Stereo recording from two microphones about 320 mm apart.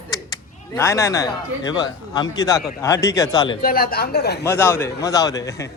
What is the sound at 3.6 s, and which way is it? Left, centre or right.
Speech, left.